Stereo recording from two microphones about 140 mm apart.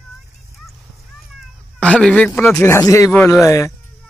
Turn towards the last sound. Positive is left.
turn(degrees=20)  # may be behind; listen again after turning